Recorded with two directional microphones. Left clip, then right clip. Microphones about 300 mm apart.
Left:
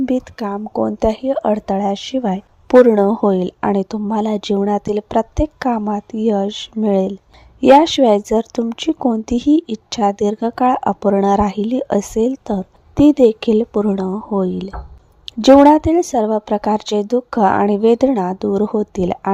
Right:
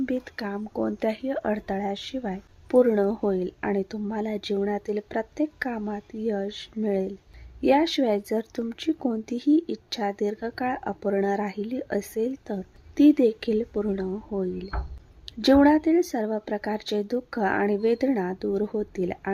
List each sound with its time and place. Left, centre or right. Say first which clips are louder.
0.0 s speech: left 10 dB; left